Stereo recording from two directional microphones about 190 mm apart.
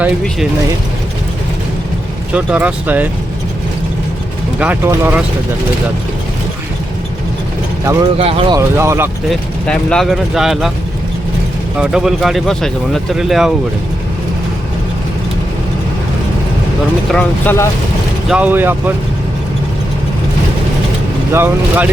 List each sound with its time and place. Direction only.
2.3 s speech: 5° right (ahead or behind)
4.6 s speech: 10° right (ahead or behind)
8.2 s speech: 30° right (ahead or behind)
8.5 s speech: 15° right (ahead or behind)
9.3 s speech: 5° left (ahead or behind)
11.8 s speech: 5° right (ahead or behind)
17.1 s speech: 5° left (ahead or behind)
18.3 s speech: 5° right (ahead or behind)
21.3 s speech: 10° right (ahead or behind)